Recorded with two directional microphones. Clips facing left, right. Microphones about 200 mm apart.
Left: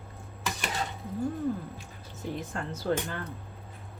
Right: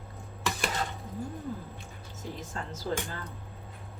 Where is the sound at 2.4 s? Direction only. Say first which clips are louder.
Left 4 dB; 60° left (ahead or behind).